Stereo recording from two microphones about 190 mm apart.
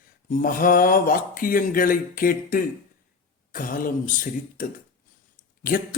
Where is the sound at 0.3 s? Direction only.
45° left (ahead or behind).